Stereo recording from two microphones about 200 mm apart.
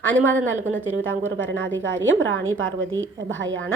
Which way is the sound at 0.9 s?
80° right.